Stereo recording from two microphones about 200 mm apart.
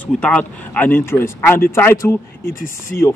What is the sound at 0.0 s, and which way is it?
Speech, 5° left (ahead or behind).